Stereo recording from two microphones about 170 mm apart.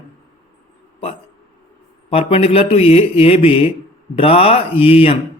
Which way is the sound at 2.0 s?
35° left (ahead or behind).